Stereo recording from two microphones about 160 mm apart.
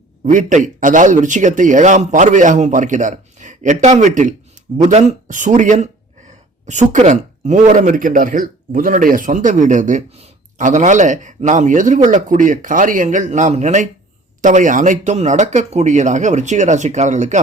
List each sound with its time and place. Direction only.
0.3 s speech: 50° right (ahead or behind)